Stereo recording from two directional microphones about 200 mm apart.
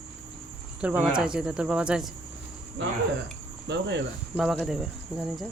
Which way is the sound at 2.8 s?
65° right (ahead or behind).